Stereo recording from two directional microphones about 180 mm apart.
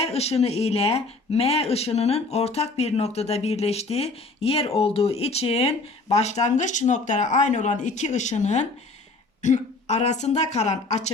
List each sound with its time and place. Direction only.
0.0 s speech: 35° left (ahead or behind)